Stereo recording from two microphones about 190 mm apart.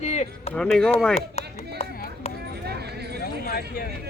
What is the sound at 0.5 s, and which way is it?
Speech, 5° left (ahead or behind).